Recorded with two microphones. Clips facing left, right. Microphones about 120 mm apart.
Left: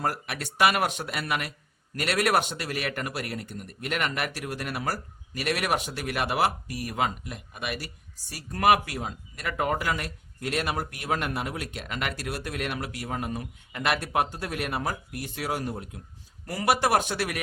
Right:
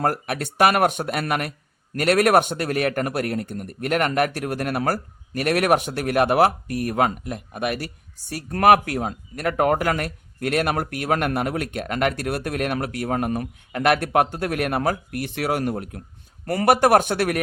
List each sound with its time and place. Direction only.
0.0 s speech: 50° right (ahead or behind)